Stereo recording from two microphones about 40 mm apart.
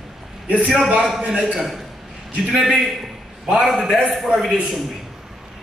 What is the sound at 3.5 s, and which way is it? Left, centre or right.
A man's voice, centre.